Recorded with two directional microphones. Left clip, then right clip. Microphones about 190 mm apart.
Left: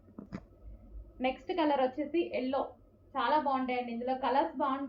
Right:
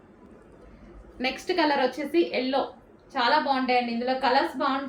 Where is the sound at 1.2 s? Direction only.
20° right (ahead or behind).